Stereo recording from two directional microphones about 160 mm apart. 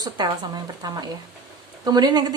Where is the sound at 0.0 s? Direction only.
25° right (ahead or behind).